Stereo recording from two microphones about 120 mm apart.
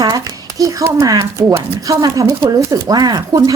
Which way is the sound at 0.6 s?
25° right (ahead or behind).